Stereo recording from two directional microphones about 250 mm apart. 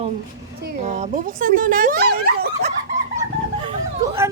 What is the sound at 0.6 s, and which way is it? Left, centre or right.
Speech, right.